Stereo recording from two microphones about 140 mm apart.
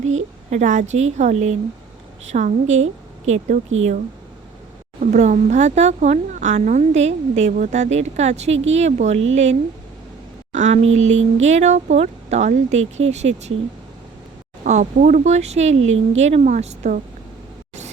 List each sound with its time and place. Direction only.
0.5 s speech: 60° right (ahead or behind)
4.9 s speech: 65° right (ahead or behind)
14.6 s speech: 65° right (ahead or behind)